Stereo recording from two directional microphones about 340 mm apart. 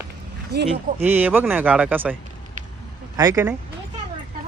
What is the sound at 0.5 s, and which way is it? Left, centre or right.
Speech, right.